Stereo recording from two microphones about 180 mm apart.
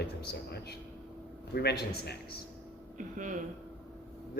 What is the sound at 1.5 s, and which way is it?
Speech, 65° left (ahead or behind).